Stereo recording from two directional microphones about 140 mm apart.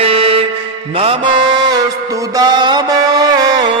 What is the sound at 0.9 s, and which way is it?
Music, 40° right (ahead or behind).